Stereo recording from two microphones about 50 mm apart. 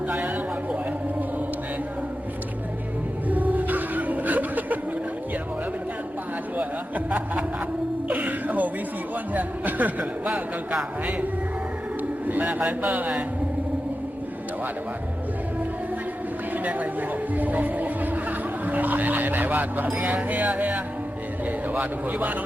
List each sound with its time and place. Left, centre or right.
3.2 s a sound: right
6.6 s speech: right
8.1 s whimper: right
9.3 s speech: right
12.3 s speech: right
16.6 s a man's voice: right